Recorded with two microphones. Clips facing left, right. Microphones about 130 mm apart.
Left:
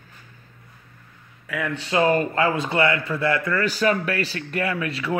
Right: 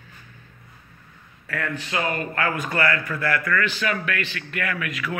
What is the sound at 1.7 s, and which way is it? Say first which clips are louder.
Speech: left 9 dB; 30° left (ahead or behind).